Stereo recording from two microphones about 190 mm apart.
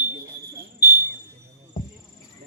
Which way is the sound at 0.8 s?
60° left (ahead or behind).